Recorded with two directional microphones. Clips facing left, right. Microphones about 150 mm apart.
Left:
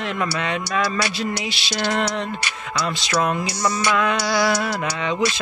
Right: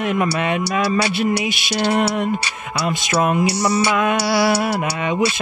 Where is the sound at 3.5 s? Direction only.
30° right (ahead or behind).